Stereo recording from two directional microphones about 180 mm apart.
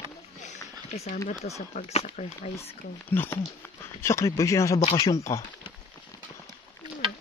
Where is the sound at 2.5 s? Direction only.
10° left (ahead or behind).